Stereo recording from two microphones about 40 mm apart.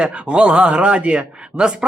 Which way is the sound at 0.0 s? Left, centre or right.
Right.